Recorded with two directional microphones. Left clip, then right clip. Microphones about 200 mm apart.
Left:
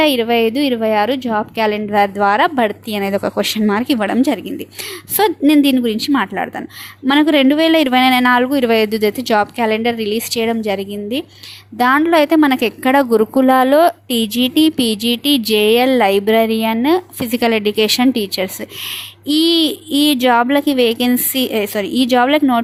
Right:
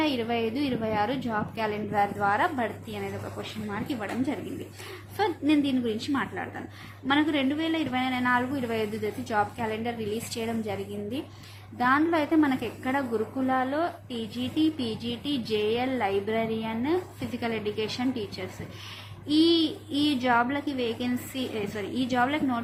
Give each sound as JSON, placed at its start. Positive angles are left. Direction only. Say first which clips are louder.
{"t": 0.0, "sound": "speech", "louder": "left 14 dB", "side_deg": 45}